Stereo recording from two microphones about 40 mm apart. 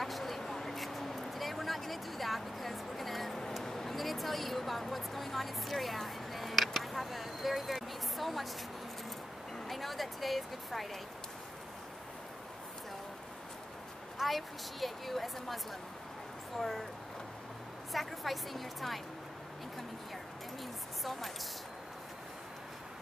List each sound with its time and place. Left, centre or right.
0.0 s a sound: centre
3.6 s speech: centre
9.7 s a woman's voice: centre
14.1 s a woman's voice: centre
17.9 s a woman's voice: centre
21.0 s speech: centre